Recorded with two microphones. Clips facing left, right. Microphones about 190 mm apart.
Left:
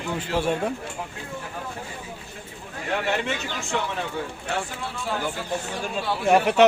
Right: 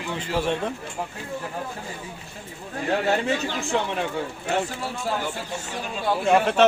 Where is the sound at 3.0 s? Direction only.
35° right (ahead or behind).